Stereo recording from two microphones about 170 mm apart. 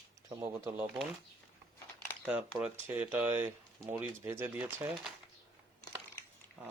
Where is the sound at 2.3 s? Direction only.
10° right (ahead or behind).